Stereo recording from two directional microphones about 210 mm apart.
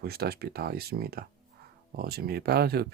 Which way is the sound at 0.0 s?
50° right (ahead or behind).